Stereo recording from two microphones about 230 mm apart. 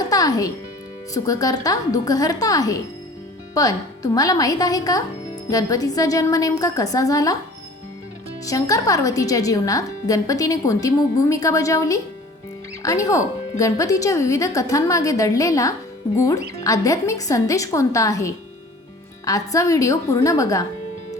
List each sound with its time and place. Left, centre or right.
0.1 s music: centre
1.1 s a woman's voice: centre
8.4 s a woman's voice: centre